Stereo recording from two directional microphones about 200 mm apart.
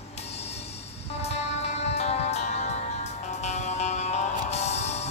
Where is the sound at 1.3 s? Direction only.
30° left (ahead or behind).